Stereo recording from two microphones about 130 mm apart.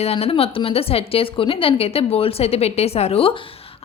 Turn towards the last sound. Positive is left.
turn(degrees=50)  # may be behind; listen again after turning